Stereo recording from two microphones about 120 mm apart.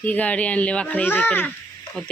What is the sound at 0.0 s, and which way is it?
Speech, 15° left (ahead or behind).